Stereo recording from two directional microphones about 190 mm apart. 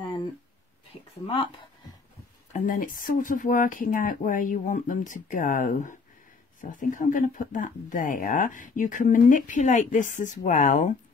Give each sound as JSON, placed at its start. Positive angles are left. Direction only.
{"t": 2.5, "sound": "speech", "side_deg": 45}